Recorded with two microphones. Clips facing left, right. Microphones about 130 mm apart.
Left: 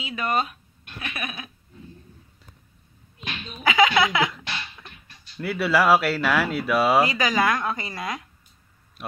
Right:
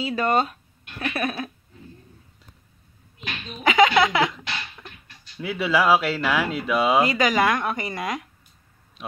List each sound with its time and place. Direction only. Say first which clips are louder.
0.0 s speech: right 4 dB; 35° right (ahead or behind)
3.6 s speech: right 2 dB; 25° right (ahead or behind)
4.4 s a sound: right 1 dB; 10° right (ahead or behind)
5.6 s speech: even; 5° left (ahead or behind)
7.0 s speech: right 1 dB; 20° right (ahead or behind)